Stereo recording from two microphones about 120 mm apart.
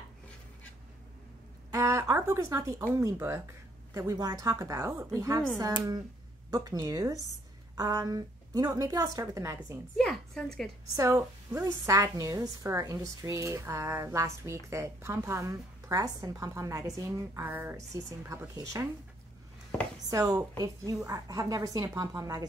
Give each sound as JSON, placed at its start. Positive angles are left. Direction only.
{"t": 1.7, "sound": "speech", "side_deg": -25}
{"t": 3.2, "sound": "speech", "side_deg": -15}
{"t": 3.9, "sound": "a woman's voice", "side_deg": -25}
{"t": 6.5, "sound": "a woman's voice", "side_deg": -30}
{"t": 9.9, "sound": "a woman's voice", "side_deg": 5}
{"t": 11.0, "sound": "a woman's voice", "side_deg": -25}
{"t": 20.1, "sound": "a woman's voice", "side_deg": -30}